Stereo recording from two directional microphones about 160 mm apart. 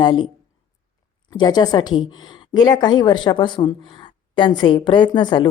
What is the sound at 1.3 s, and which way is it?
A woman's voice, 25° left (ahead or behind).